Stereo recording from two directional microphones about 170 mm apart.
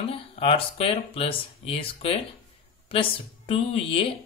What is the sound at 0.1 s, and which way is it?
Speech, 35° left (ahead or behind).